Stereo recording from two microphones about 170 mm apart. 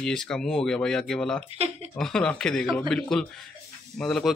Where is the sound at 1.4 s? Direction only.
35° right (ahead or behind).